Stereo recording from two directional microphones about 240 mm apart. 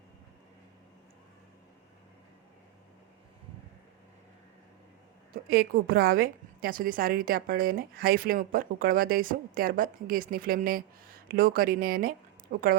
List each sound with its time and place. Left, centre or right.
5.3 s a woman's voice: right